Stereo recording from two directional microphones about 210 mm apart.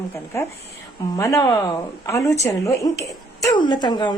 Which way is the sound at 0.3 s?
15° left (ahead or behind).